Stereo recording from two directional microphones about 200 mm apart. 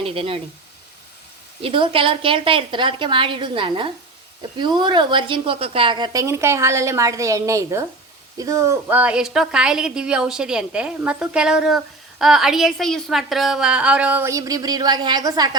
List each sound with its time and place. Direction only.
0.0 s a woman's voice: 30° right (ahead or behind)
1.6 s a woman's voice: 25° right (ahead or behind)